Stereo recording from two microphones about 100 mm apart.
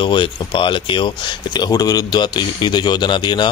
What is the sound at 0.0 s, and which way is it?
Speech, 55° left (ahead or behind).